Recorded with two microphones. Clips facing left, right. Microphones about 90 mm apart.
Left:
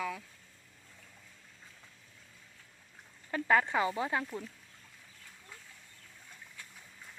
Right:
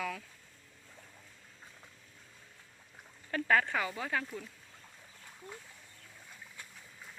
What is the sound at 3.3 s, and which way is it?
Speech, 20° left (ahead or behind).